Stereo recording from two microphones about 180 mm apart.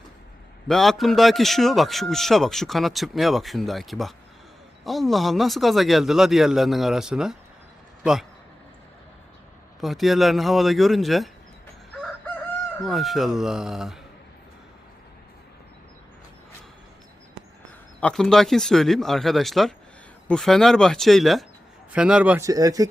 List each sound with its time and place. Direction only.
0.7 s a man's voice: centre (ahead or behind)
9.8 s a man's voice: centre (ahead or behind)
11.9 s chicken: centre (ahead or behind)
12.8 s a man's voice: centre (ahead or behind)
18.0 s a man's voice: 5° left (ahead or behind)
22.4 s speech: 20° right (ahead or behind)